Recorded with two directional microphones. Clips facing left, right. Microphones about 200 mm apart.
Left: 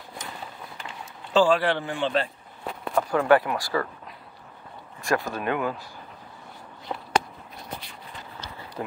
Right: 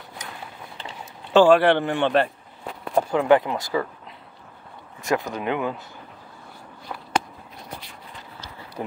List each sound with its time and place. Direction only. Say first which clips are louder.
1.3 s speech: right 6 dB; 65° right (ahead or behind)
2.9 s a sound: right 3 dB; 30° right (ahead or behind)
3.2 s speech: right 1 dB; 20° right (ahead or behind)
5.0 s speech: right 1 dB; 20° right (ahead or behind)
6.9 s a sound: left 3 dB; 15° left (ahead or behind)
8.8 s speech: right 2 dB; 15° right (ahead or behind)